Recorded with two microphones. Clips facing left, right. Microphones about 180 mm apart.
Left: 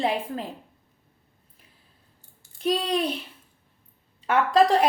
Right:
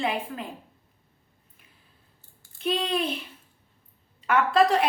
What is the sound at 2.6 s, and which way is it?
Speech, 35° left (ahead or behind).